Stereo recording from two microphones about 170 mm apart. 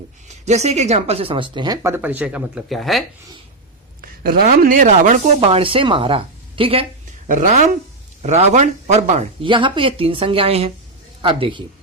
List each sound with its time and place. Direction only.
0.4 s speech: 40° right (ahead or behind); by 3.0 s centre (ahead or behind)
4.0 s speech: 60° right (ahead or behind); by 6.8 s 35° right (ahead or behind)
7.3 s speech: 50° right (ahead or behind); by 11.6 s 30° right (ahead or behind)